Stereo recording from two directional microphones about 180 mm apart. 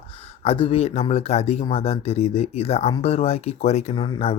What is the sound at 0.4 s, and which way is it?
Speech, 30° left (ahead or behind).